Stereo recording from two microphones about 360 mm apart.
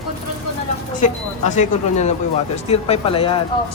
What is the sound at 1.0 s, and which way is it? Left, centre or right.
Speech, centre.